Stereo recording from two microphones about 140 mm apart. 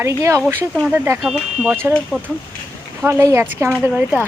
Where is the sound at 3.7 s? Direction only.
5° right (ahead or behind).